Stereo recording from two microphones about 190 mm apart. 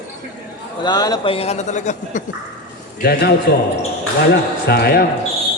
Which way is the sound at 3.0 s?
55° left (ahead or behind).